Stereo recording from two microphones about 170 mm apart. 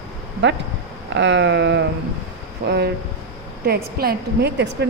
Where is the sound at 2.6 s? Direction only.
80° right.